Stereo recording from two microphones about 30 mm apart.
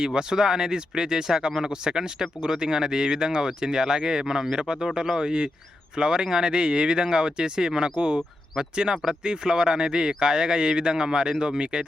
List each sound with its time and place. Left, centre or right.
0.0 s speech: right
7.9 s speech: right
8.7 s speech: right